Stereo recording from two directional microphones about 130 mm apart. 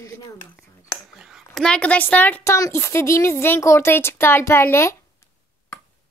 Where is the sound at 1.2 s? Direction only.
Centre (ahead or behind); by 4.9 s 20° left (ahead or behind).